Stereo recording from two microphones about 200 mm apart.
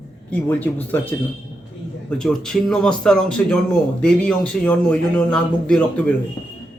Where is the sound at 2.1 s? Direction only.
5° left (ahead or behind).